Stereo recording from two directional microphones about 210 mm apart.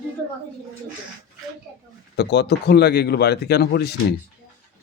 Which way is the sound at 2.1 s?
55° left (ahead or behind).